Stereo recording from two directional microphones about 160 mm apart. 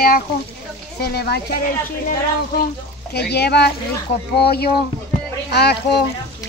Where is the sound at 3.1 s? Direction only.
90° left.